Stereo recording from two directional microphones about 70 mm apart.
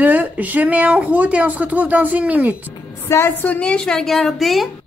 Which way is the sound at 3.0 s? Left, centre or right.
Left.